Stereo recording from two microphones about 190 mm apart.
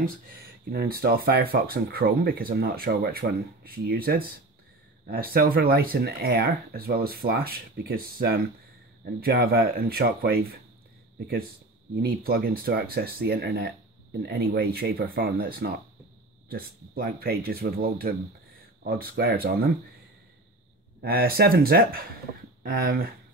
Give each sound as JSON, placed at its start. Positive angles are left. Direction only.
{"t": 0.7, "sound": "speech", "side_deg": -55}
{"t": 12.0, "sound": "speech", "side_deg": -50}
{"t": 21.0, "sound": "speech", "side_deg": -50}